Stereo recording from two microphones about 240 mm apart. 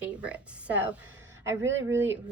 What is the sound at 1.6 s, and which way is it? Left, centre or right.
Speech, right.